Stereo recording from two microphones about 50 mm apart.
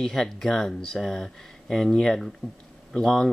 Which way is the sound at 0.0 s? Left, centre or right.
Centre.